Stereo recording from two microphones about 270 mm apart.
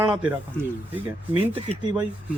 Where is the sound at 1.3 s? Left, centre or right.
Centre.